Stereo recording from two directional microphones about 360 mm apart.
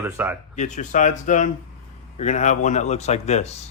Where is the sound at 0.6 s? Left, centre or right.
Centre.